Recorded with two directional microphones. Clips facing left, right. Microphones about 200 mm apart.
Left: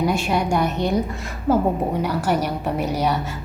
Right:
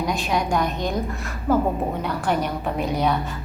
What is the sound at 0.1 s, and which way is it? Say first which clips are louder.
A woman's voice: left 2 dB; 10° left (ahead or behind).